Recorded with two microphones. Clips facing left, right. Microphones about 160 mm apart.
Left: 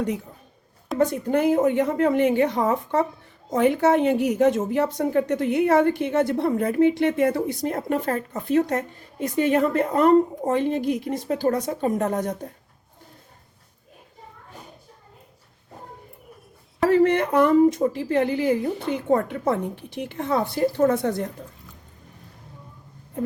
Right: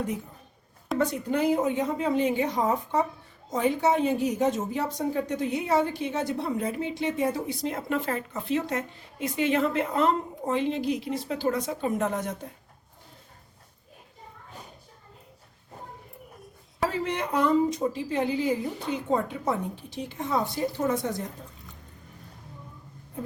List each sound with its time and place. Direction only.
0.9 s a woman's voice: 55° left (ahead or behind)
16.9 s a woman's voice: 55° left (ahead or behind)